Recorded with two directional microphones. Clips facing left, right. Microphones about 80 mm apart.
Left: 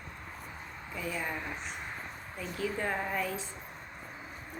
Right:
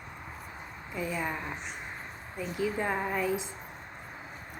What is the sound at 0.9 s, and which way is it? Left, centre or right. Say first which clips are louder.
Speech: right 3 dB; centre.